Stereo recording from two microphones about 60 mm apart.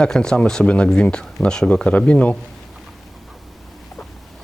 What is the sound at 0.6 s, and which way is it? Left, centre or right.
Speech, centre.